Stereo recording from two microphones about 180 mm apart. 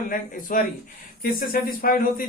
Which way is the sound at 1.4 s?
55° left (ahead or behind).